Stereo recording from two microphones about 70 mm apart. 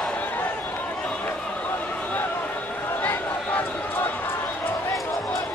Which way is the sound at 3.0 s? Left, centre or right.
Left.